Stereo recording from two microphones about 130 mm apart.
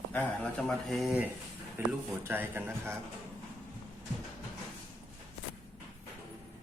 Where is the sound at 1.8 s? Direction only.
15° right (ahead or behind).